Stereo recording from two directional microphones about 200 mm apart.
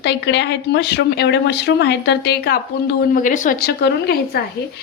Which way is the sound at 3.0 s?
40° left (ahead or behind).